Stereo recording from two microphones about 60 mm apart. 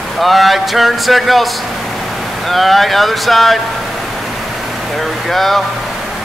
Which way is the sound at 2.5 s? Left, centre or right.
Centre.